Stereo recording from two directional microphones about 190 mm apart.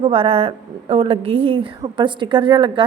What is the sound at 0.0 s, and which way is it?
A woman's voice, 30° right (ahead or behind).